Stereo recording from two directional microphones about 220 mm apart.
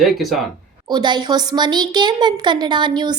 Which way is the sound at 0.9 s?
20° right (ahead or behind).